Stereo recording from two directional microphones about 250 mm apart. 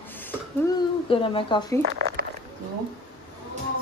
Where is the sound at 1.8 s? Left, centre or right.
Right.